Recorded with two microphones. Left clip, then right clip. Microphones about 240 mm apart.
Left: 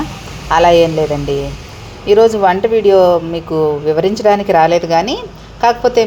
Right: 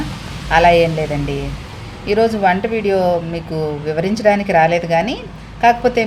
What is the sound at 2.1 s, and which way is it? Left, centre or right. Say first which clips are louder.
Speech: left 5 dB; centre.